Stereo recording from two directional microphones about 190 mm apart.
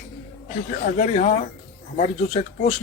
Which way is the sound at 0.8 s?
40° left (ahead or behind).